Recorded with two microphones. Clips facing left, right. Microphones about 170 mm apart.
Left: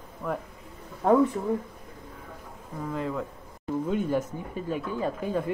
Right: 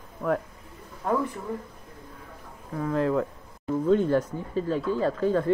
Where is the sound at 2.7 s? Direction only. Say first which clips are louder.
Right 6 dB; 70° right (ahead or behind).